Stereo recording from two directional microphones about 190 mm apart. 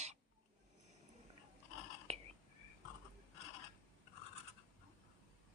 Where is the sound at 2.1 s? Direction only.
30° right (ahead or behind).